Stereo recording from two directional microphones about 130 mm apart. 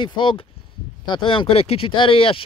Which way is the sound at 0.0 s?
35° left (ahead or behind).